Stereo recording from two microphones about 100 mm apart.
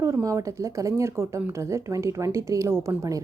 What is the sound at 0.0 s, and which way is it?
A woman's voice, 30° right (ahead or behind).